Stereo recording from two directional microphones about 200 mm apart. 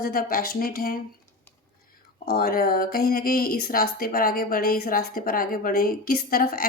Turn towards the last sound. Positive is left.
turn(degrees=45)  # may be behind; listen again after turning